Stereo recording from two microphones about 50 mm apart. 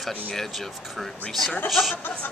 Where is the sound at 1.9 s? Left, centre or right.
Left.